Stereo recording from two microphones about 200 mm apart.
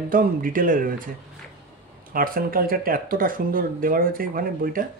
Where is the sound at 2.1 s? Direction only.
45° right (ahead or behind).